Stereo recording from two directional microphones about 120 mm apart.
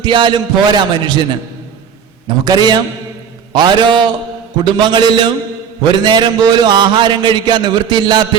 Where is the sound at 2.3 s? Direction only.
35° right (ahead or behind).